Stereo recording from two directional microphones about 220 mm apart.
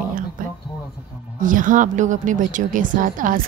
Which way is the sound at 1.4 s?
35° right (ahead or behind).